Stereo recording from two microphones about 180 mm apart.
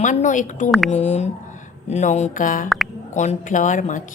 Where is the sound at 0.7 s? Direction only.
Centre (ahead or behind).